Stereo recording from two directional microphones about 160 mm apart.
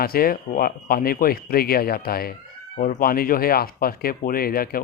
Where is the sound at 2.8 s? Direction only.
60° left (ahead or behind).